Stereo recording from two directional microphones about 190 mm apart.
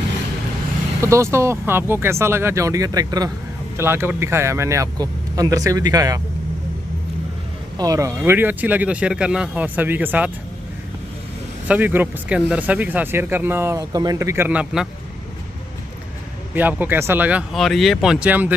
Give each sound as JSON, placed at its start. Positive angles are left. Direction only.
{"t": 1.0, "sound": "speech", "side_deg": -15}
{"t": 7.7, "sound": "speech", "side_deg": -20}
{"t": 11.6, "sound": "speech", "side_deg": -10}
{"t": 16.5, "sound": "speech", "side_deg": -10}